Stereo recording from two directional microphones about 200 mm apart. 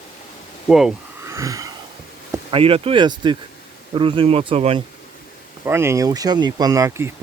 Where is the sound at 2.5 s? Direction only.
30° right (ahead or behind).